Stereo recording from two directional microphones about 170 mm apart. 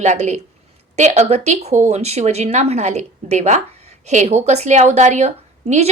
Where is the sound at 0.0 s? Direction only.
40° right (ahead or behind).